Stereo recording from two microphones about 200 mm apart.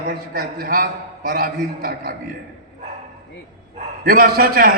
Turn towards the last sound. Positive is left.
turn(degrees=-45)  # may be behind; listen again after turning